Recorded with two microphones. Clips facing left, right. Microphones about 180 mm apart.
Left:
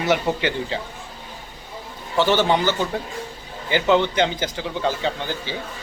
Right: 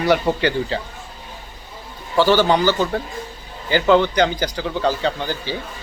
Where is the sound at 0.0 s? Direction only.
20° left (ahead or behind).